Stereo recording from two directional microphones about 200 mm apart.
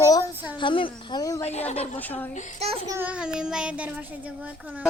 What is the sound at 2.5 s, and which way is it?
Speech, 30° right (ahead or behind).